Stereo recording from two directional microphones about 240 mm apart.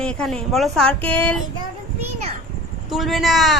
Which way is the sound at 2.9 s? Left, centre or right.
Centre.